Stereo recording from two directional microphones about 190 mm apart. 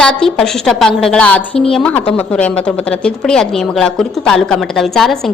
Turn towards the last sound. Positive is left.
turn(degrees=0)  # may be behind; listen again after turning